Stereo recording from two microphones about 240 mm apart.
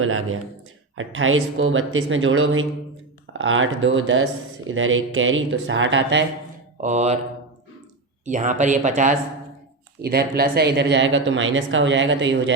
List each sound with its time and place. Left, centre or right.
0.0 s speech: right
6.8 s speech: right
8.2 s speech: right
10.0 s speech: right